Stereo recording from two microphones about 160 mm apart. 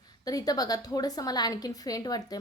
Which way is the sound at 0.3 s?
25° left (ahead or behind).